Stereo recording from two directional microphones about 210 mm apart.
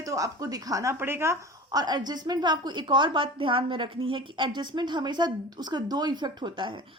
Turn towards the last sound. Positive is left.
turn(degrees=-20)  # may be behind; listen again after turning